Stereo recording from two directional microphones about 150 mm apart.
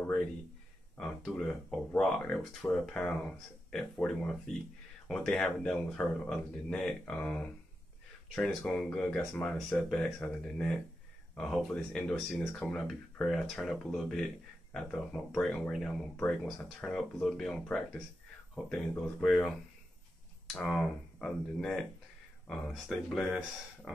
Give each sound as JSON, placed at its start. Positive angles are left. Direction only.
{"t": 0.9, "sound": "speech", "side_deg": 5}
{"t": 20.5, "sound": "speech", "side_deg": 5}